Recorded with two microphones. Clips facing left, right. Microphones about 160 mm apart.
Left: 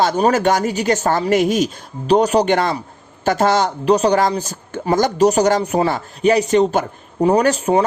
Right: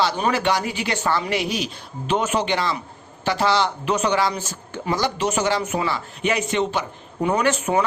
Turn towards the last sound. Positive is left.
turn(degrees=35)  # may be behind; listen again after turning